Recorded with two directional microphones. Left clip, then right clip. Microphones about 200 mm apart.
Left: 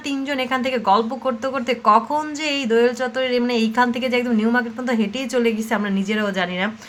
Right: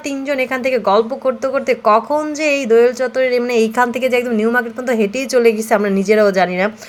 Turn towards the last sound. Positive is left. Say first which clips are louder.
# right 8 dB
turn(degrees=-25)  # may be behind; listen again after turning